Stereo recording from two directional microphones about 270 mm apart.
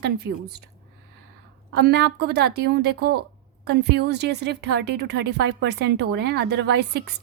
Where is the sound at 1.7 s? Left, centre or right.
Right.